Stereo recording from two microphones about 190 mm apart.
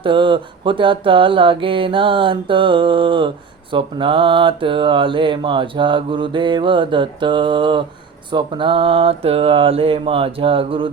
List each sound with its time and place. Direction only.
0.0 s mantra: 25° right (ahead or behind)